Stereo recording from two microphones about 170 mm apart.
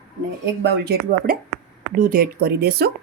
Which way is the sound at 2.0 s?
55° right (ahead or behind).